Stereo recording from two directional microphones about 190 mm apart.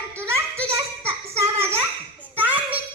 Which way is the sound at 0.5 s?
15° right (ahead or behind).